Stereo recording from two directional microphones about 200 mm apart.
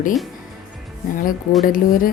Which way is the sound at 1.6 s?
45° left (ahead or behind).